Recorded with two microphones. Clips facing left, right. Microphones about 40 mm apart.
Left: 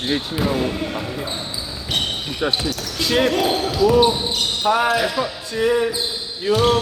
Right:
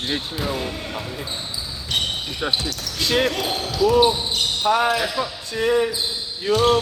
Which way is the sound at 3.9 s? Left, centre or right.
Centre.